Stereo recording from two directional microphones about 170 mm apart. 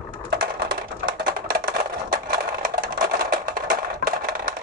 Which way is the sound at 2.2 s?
55° right (ahead or behind).